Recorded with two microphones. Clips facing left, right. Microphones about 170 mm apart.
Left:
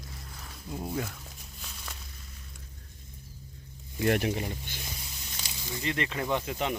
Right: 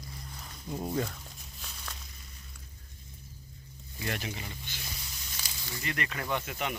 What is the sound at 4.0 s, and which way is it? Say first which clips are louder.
Speech: left 10 dB; 55° left (ahead or behind).